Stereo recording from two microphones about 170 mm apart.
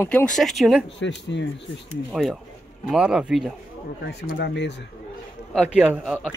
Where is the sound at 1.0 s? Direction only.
90° left.